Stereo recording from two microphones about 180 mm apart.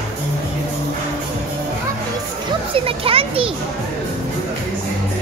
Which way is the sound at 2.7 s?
30° right (ahead or behind).